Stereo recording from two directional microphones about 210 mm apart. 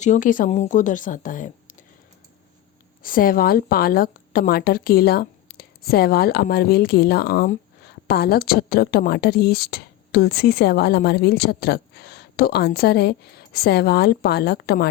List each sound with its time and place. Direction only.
0.0 s speech: 35° left (ahead or behind)
3.0 s a woman's voice: 40° left (ahead or behind)